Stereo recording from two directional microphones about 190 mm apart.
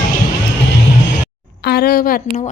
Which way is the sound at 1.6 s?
55° left (ahead or behind).